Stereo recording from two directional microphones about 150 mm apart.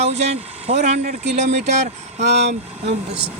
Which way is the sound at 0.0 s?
45° right (ahead or behind).